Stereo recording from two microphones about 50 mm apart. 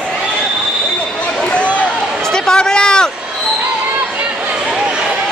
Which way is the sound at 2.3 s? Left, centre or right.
Centre.